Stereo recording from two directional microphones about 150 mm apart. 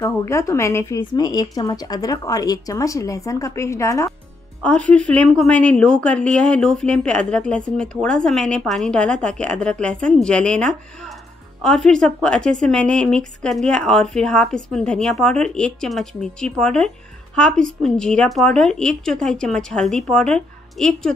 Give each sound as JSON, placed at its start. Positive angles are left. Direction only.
{"t": 0.0, "sound": "a woman's voice", "side_deg": 20}
{"t": 4.6, "sound": "a woman's voice", "side_deg": 10}